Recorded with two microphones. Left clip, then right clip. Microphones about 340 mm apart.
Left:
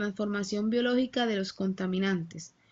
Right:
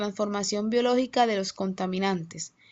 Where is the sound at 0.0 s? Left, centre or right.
Centre.